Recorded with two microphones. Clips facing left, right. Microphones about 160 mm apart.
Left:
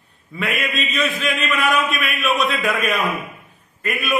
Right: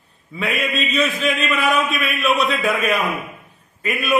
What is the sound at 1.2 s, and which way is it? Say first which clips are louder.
Speech: right 1 dB; centre (ahead or behind).